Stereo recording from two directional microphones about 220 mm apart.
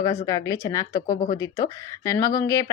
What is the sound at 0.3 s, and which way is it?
Speech, 15° left (ahead or behind).